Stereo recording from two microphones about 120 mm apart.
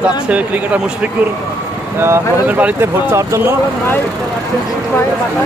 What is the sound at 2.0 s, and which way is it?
Speech, 20° right (ahead or behind).